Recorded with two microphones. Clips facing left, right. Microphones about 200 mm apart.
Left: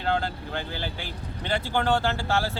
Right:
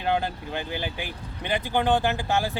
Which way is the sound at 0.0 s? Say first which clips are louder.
Right 1 dB; 15° right (ahead or behind).